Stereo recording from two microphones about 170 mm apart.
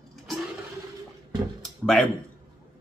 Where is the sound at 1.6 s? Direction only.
Centre (ahead or behind).